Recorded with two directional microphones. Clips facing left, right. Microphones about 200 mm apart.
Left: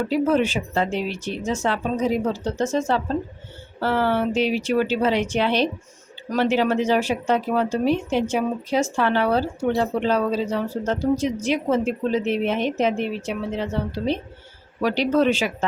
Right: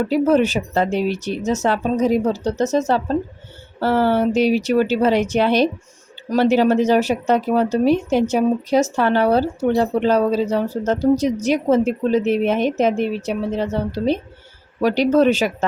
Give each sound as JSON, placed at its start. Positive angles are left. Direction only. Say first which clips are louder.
{"t": 0.1, "sound": "speech", "louder": "right 4 dB", "side_deg": -40}